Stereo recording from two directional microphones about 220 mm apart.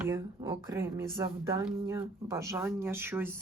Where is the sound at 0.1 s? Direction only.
15° right (ahead or behind).